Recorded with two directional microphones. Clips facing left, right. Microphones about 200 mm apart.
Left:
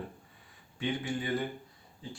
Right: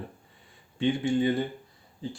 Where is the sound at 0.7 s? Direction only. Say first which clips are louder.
Right 8 dB; 25° right (ahead or behind).